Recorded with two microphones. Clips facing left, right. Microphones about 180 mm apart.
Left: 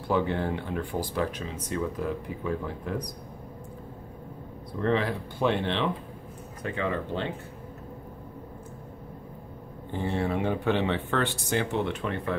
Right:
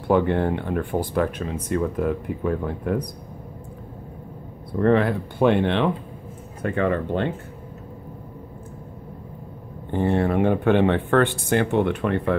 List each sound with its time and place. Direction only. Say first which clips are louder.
0.1 s speech: right 7 dB; 55° right (ahead or behind)
4.7 s speech: right 8 dB; 55° right (ahead or behind)
9.8 s speech: right 8 dB; 60° right (ahead or behind)